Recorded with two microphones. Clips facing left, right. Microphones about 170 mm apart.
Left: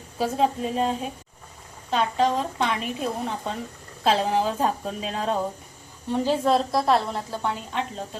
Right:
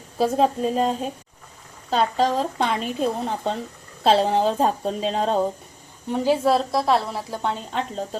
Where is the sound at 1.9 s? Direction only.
35° right (ahead or behind).